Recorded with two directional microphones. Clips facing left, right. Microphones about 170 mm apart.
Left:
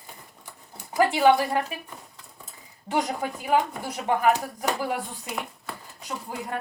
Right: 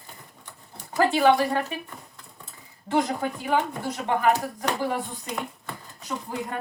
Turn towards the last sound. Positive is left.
turn(degrees=5)  # may be behind; listen again after turning